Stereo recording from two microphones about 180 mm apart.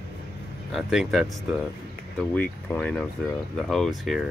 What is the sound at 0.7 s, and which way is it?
Speech, centre (ahead or behind).